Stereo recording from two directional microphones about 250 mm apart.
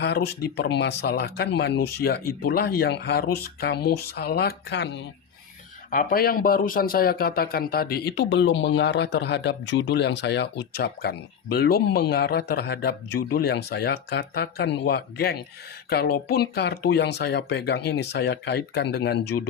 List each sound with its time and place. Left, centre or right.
0.0 s speech: left
5.9 s speech: left